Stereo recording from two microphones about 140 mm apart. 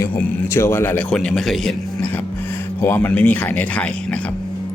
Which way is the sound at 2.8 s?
15° left (ahead or behind).